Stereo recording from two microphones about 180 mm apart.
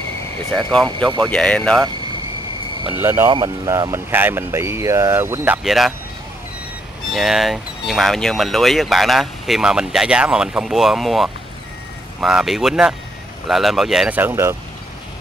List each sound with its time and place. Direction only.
0.8 s speech: 25° right (ahead or behind)
1.3 s speech: 5° left (ahead or behind)
3.0 s speech: 15° right (ahead or behind)
5.6 s speech: centre (ahead or behind)
7.1 s speech: centre (ahead or behind)